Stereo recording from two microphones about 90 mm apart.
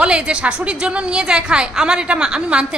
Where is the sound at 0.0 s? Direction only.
10° right (ahead or behind).